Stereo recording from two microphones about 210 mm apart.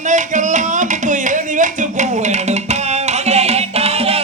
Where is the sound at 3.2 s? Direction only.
30° right (ahead or behind).